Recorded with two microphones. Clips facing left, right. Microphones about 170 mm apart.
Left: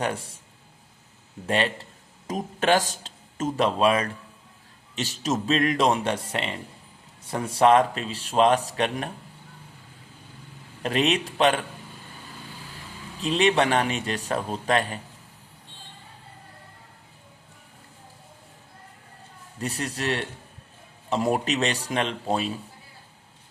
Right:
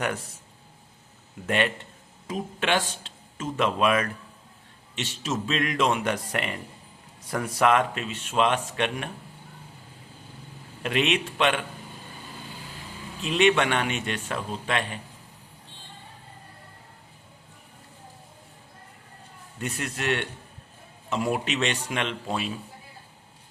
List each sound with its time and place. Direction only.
0.0 s speech: 30° left (ahead or behind)
1.5 s speech: 30° left (ahead or behind)
10.8 s speech: 35° left (ahead or behind)
13.2 s speech: 35° left (ahead or behind)
19.5 s speech: 35° left (ahead or behind)